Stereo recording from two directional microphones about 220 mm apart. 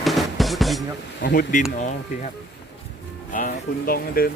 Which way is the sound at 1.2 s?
40° left (ahead or behind).